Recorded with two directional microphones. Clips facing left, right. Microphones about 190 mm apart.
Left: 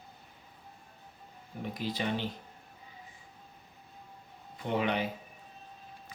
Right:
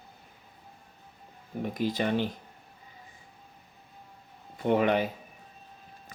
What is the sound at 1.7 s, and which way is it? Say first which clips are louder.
Speech: right 6 dB; 45° right (ahead or behind).